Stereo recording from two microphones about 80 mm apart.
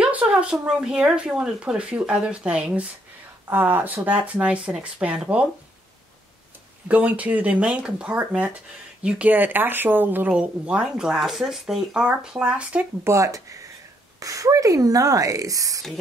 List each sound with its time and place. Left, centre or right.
0.0 s speech: centre
3.4 s speech: right
6.9 s speech: centre
10.3 s speech: centre
13.0 s speech: right